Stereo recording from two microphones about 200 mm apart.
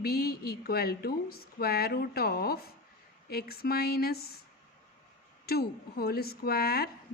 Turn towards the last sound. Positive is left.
turn(degrees=50)  # may be behind; listen again after turning